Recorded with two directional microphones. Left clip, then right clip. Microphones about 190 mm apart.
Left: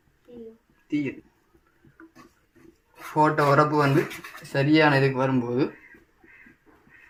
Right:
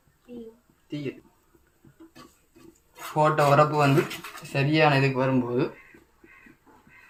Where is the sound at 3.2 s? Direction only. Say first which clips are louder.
Even; 15° left (ahead or behind).